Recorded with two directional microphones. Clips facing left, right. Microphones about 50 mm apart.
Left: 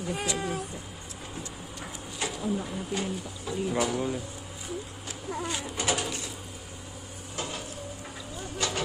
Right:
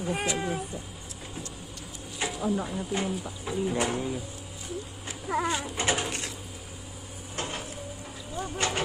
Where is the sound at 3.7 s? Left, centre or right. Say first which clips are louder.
Left 2 dB; right.